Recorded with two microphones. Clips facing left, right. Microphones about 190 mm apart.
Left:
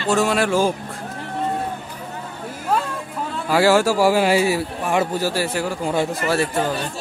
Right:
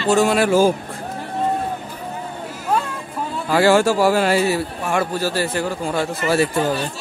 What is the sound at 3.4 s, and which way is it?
A man's voice, 5° left (ahead or behind).